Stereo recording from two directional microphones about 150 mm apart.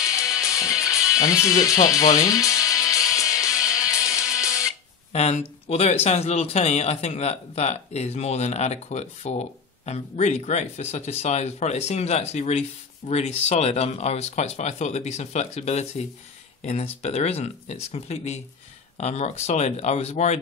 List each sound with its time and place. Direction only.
0.1 s music: 20° left (ahead or behind)
5.1 s speech: 45° left (ahead or behind)